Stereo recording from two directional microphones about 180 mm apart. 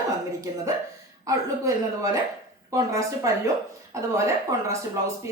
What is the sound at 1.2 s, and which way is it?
A woman's voice, 15° right (ahead or behind).